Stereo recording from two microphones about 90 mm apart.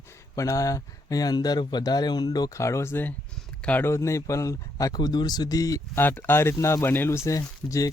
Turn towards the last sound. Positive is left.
turn(degrees=40)  # may be behind; listen again after turning